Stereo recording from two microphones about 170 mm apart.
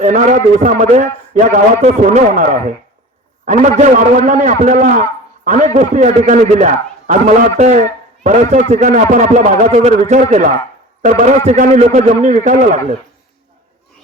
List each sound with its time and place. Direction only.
0.0 s a man's voice: 45° right (ahead or behind)